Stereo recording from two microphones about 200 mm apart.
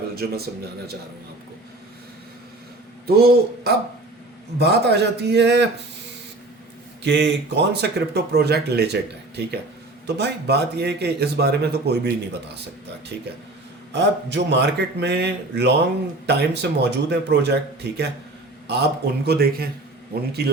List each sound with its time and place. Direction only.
0.2 s speech: 55° right (ahead or behind)
3.1 s a man's voice: 50° right (ahead or behind)
7.0 s speech: 60° right (ahead or behind)
13.9 s a man's voice: 60° right (ahead or behind)